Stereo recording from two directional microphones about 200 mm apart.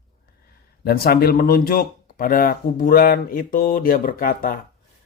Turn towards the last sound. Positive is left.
turn(degrees=45)  # may be behind; listen again after turning